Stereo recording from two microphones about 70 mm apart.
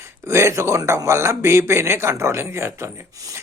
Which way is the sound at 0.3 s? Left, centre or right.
Right.